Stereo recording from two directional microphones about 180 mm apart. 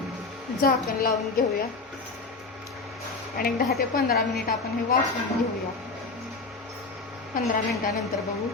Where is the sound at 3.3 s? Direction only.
55° left (ahead or behind).